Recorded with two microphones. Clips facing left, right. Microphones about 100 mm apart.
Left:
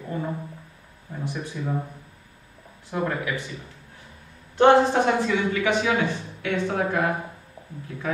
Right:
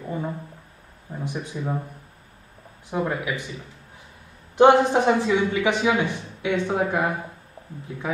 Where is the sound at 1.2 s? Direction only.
15° right (ahead or behind).